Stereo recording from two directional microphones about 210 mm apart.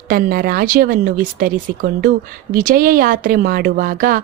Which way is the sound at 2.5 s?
40° right (ahead or behind).